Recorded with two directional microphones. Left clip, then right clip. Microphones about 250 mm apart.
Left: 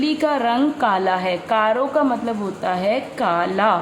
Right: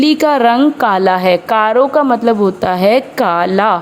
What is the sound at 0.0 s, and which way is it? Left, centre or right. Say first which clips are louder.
Speech: right 9 dB; right.